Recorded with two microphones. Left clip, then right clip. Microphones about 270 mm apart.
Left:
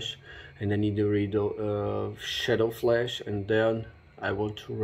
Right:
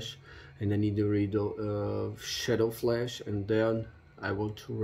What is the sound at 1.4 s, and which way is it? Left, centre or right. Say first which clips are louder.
Speech: left 4 dB; right.